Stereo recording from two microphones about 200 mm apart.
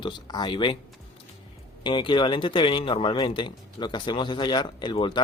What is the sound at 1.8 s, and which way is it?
Speech, 25° left (ahead or behind).